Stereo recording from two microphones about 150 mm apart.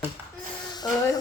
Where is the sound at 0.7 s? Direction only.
25° left (ahead or behind).